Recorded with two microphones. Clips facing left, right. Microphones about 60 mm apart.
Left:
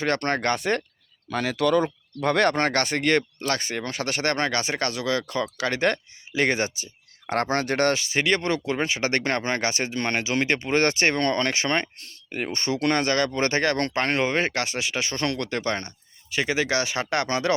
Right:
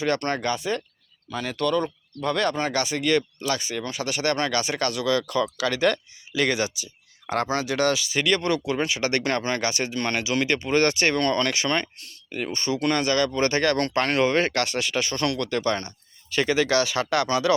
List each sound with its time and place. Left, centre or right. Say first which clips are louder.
0.0 s speech: left 1 dB; left
1.3 s speech: left 3 dB; left
16.3 s speech: right 3 dB; centre; by 17.5 s left